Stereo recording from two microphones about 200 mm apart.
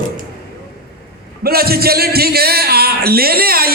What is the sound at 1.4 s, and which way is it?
A man's voice, 50° right (ahead or behind).